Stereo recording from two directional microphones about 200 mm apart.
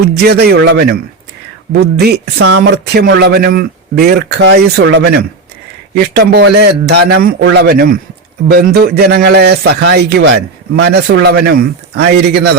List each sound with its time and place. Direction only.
0.0 s a man's voice: 55° right (ahead or behind)
6.3 s a man's voice: 55° right (ahead or behind)